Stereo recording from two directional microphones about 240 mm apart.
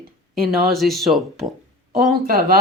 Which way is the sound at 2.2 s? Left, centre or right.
Right.